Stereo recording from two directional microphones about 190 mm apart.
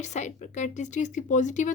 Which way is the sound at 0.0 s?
40° left (ahead or behind).